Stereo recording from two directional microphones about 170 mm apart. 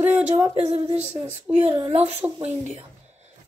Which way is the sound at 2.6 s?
40° right (ahead or behind).